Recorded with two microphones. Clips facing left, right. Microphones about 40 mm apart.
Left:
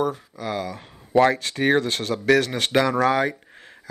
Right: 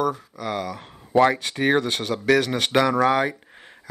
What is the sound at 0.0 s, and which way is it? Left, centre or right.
Speech, centre.